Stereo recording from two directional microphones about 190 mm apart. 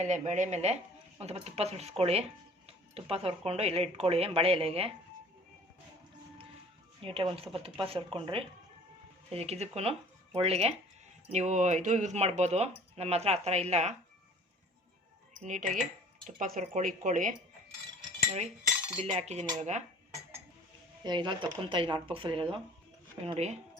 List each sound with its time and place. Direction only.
0.0 s speech: 40° right (ahead or behind)
7.0 s speech: 30° right (ahead or behind)
15.3 s speech: 40° right (ahead or behind)
18.9 s speech: 35° right (ahead or behind)
21.0 s speech: 25° right (ahead or behind)